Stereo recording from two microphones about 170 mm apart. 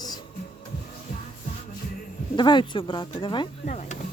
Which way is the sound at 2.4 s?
25° left (ahead or behind).